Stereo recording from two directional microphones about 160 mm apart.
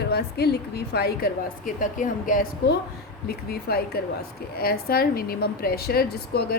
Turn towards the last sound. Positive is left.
turn(degrees=80)